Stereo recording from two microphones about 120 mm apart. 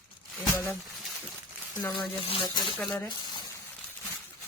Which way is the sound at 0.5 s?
15° left (ahead or behind).